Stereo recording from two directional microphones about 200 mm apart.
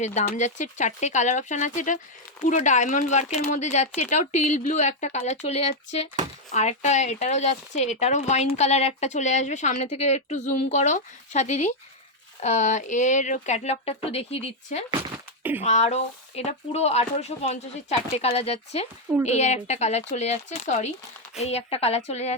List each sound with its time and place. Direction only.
0.0 s speech: 35° left (ahead or behind)